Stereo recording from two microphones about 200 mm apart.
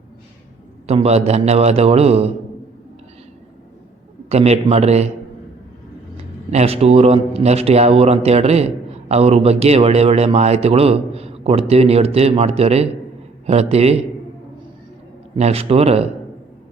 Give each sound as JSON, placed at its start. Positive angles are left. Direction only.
{"t": 0.9, "sound": "a man's voice", "side_deg": -30}
{"t": 4.3, "sound": "a man's voice", "side_deg": -30}
{"t": 6.5, "sound": "a man's voice", "side_deg": -30}
{"t": 15.4, "sound": "a man's voice", "side_deg": -30}